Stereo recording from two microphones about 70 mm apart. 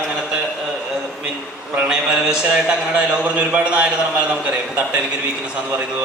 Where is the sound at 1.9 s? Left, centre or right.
Centre.